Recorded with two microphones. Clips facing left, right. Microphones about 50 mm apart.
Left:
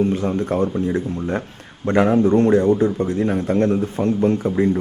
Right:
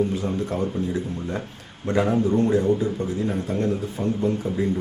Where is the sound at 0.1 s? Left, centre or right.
Left.